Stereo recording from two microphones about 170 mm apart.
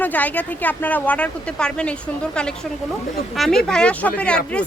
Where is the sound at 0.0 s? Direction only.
10° left (ahead or behind).